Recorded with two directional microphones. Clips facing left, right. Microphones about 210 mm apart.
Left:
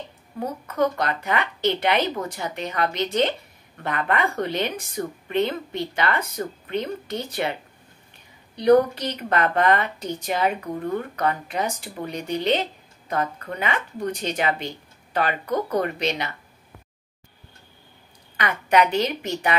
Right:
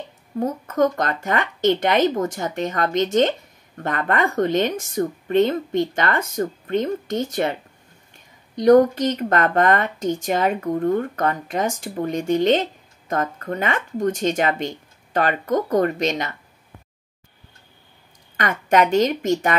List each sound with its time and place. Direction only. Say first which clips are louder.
0.4 s speech: right 4 dB; 45° right (ahead or behind)
8.5 s speech: right 3 dB; 45° right (ahead or behind)
18.3 s speech: right 2 dB; 45° right (ahead or behind)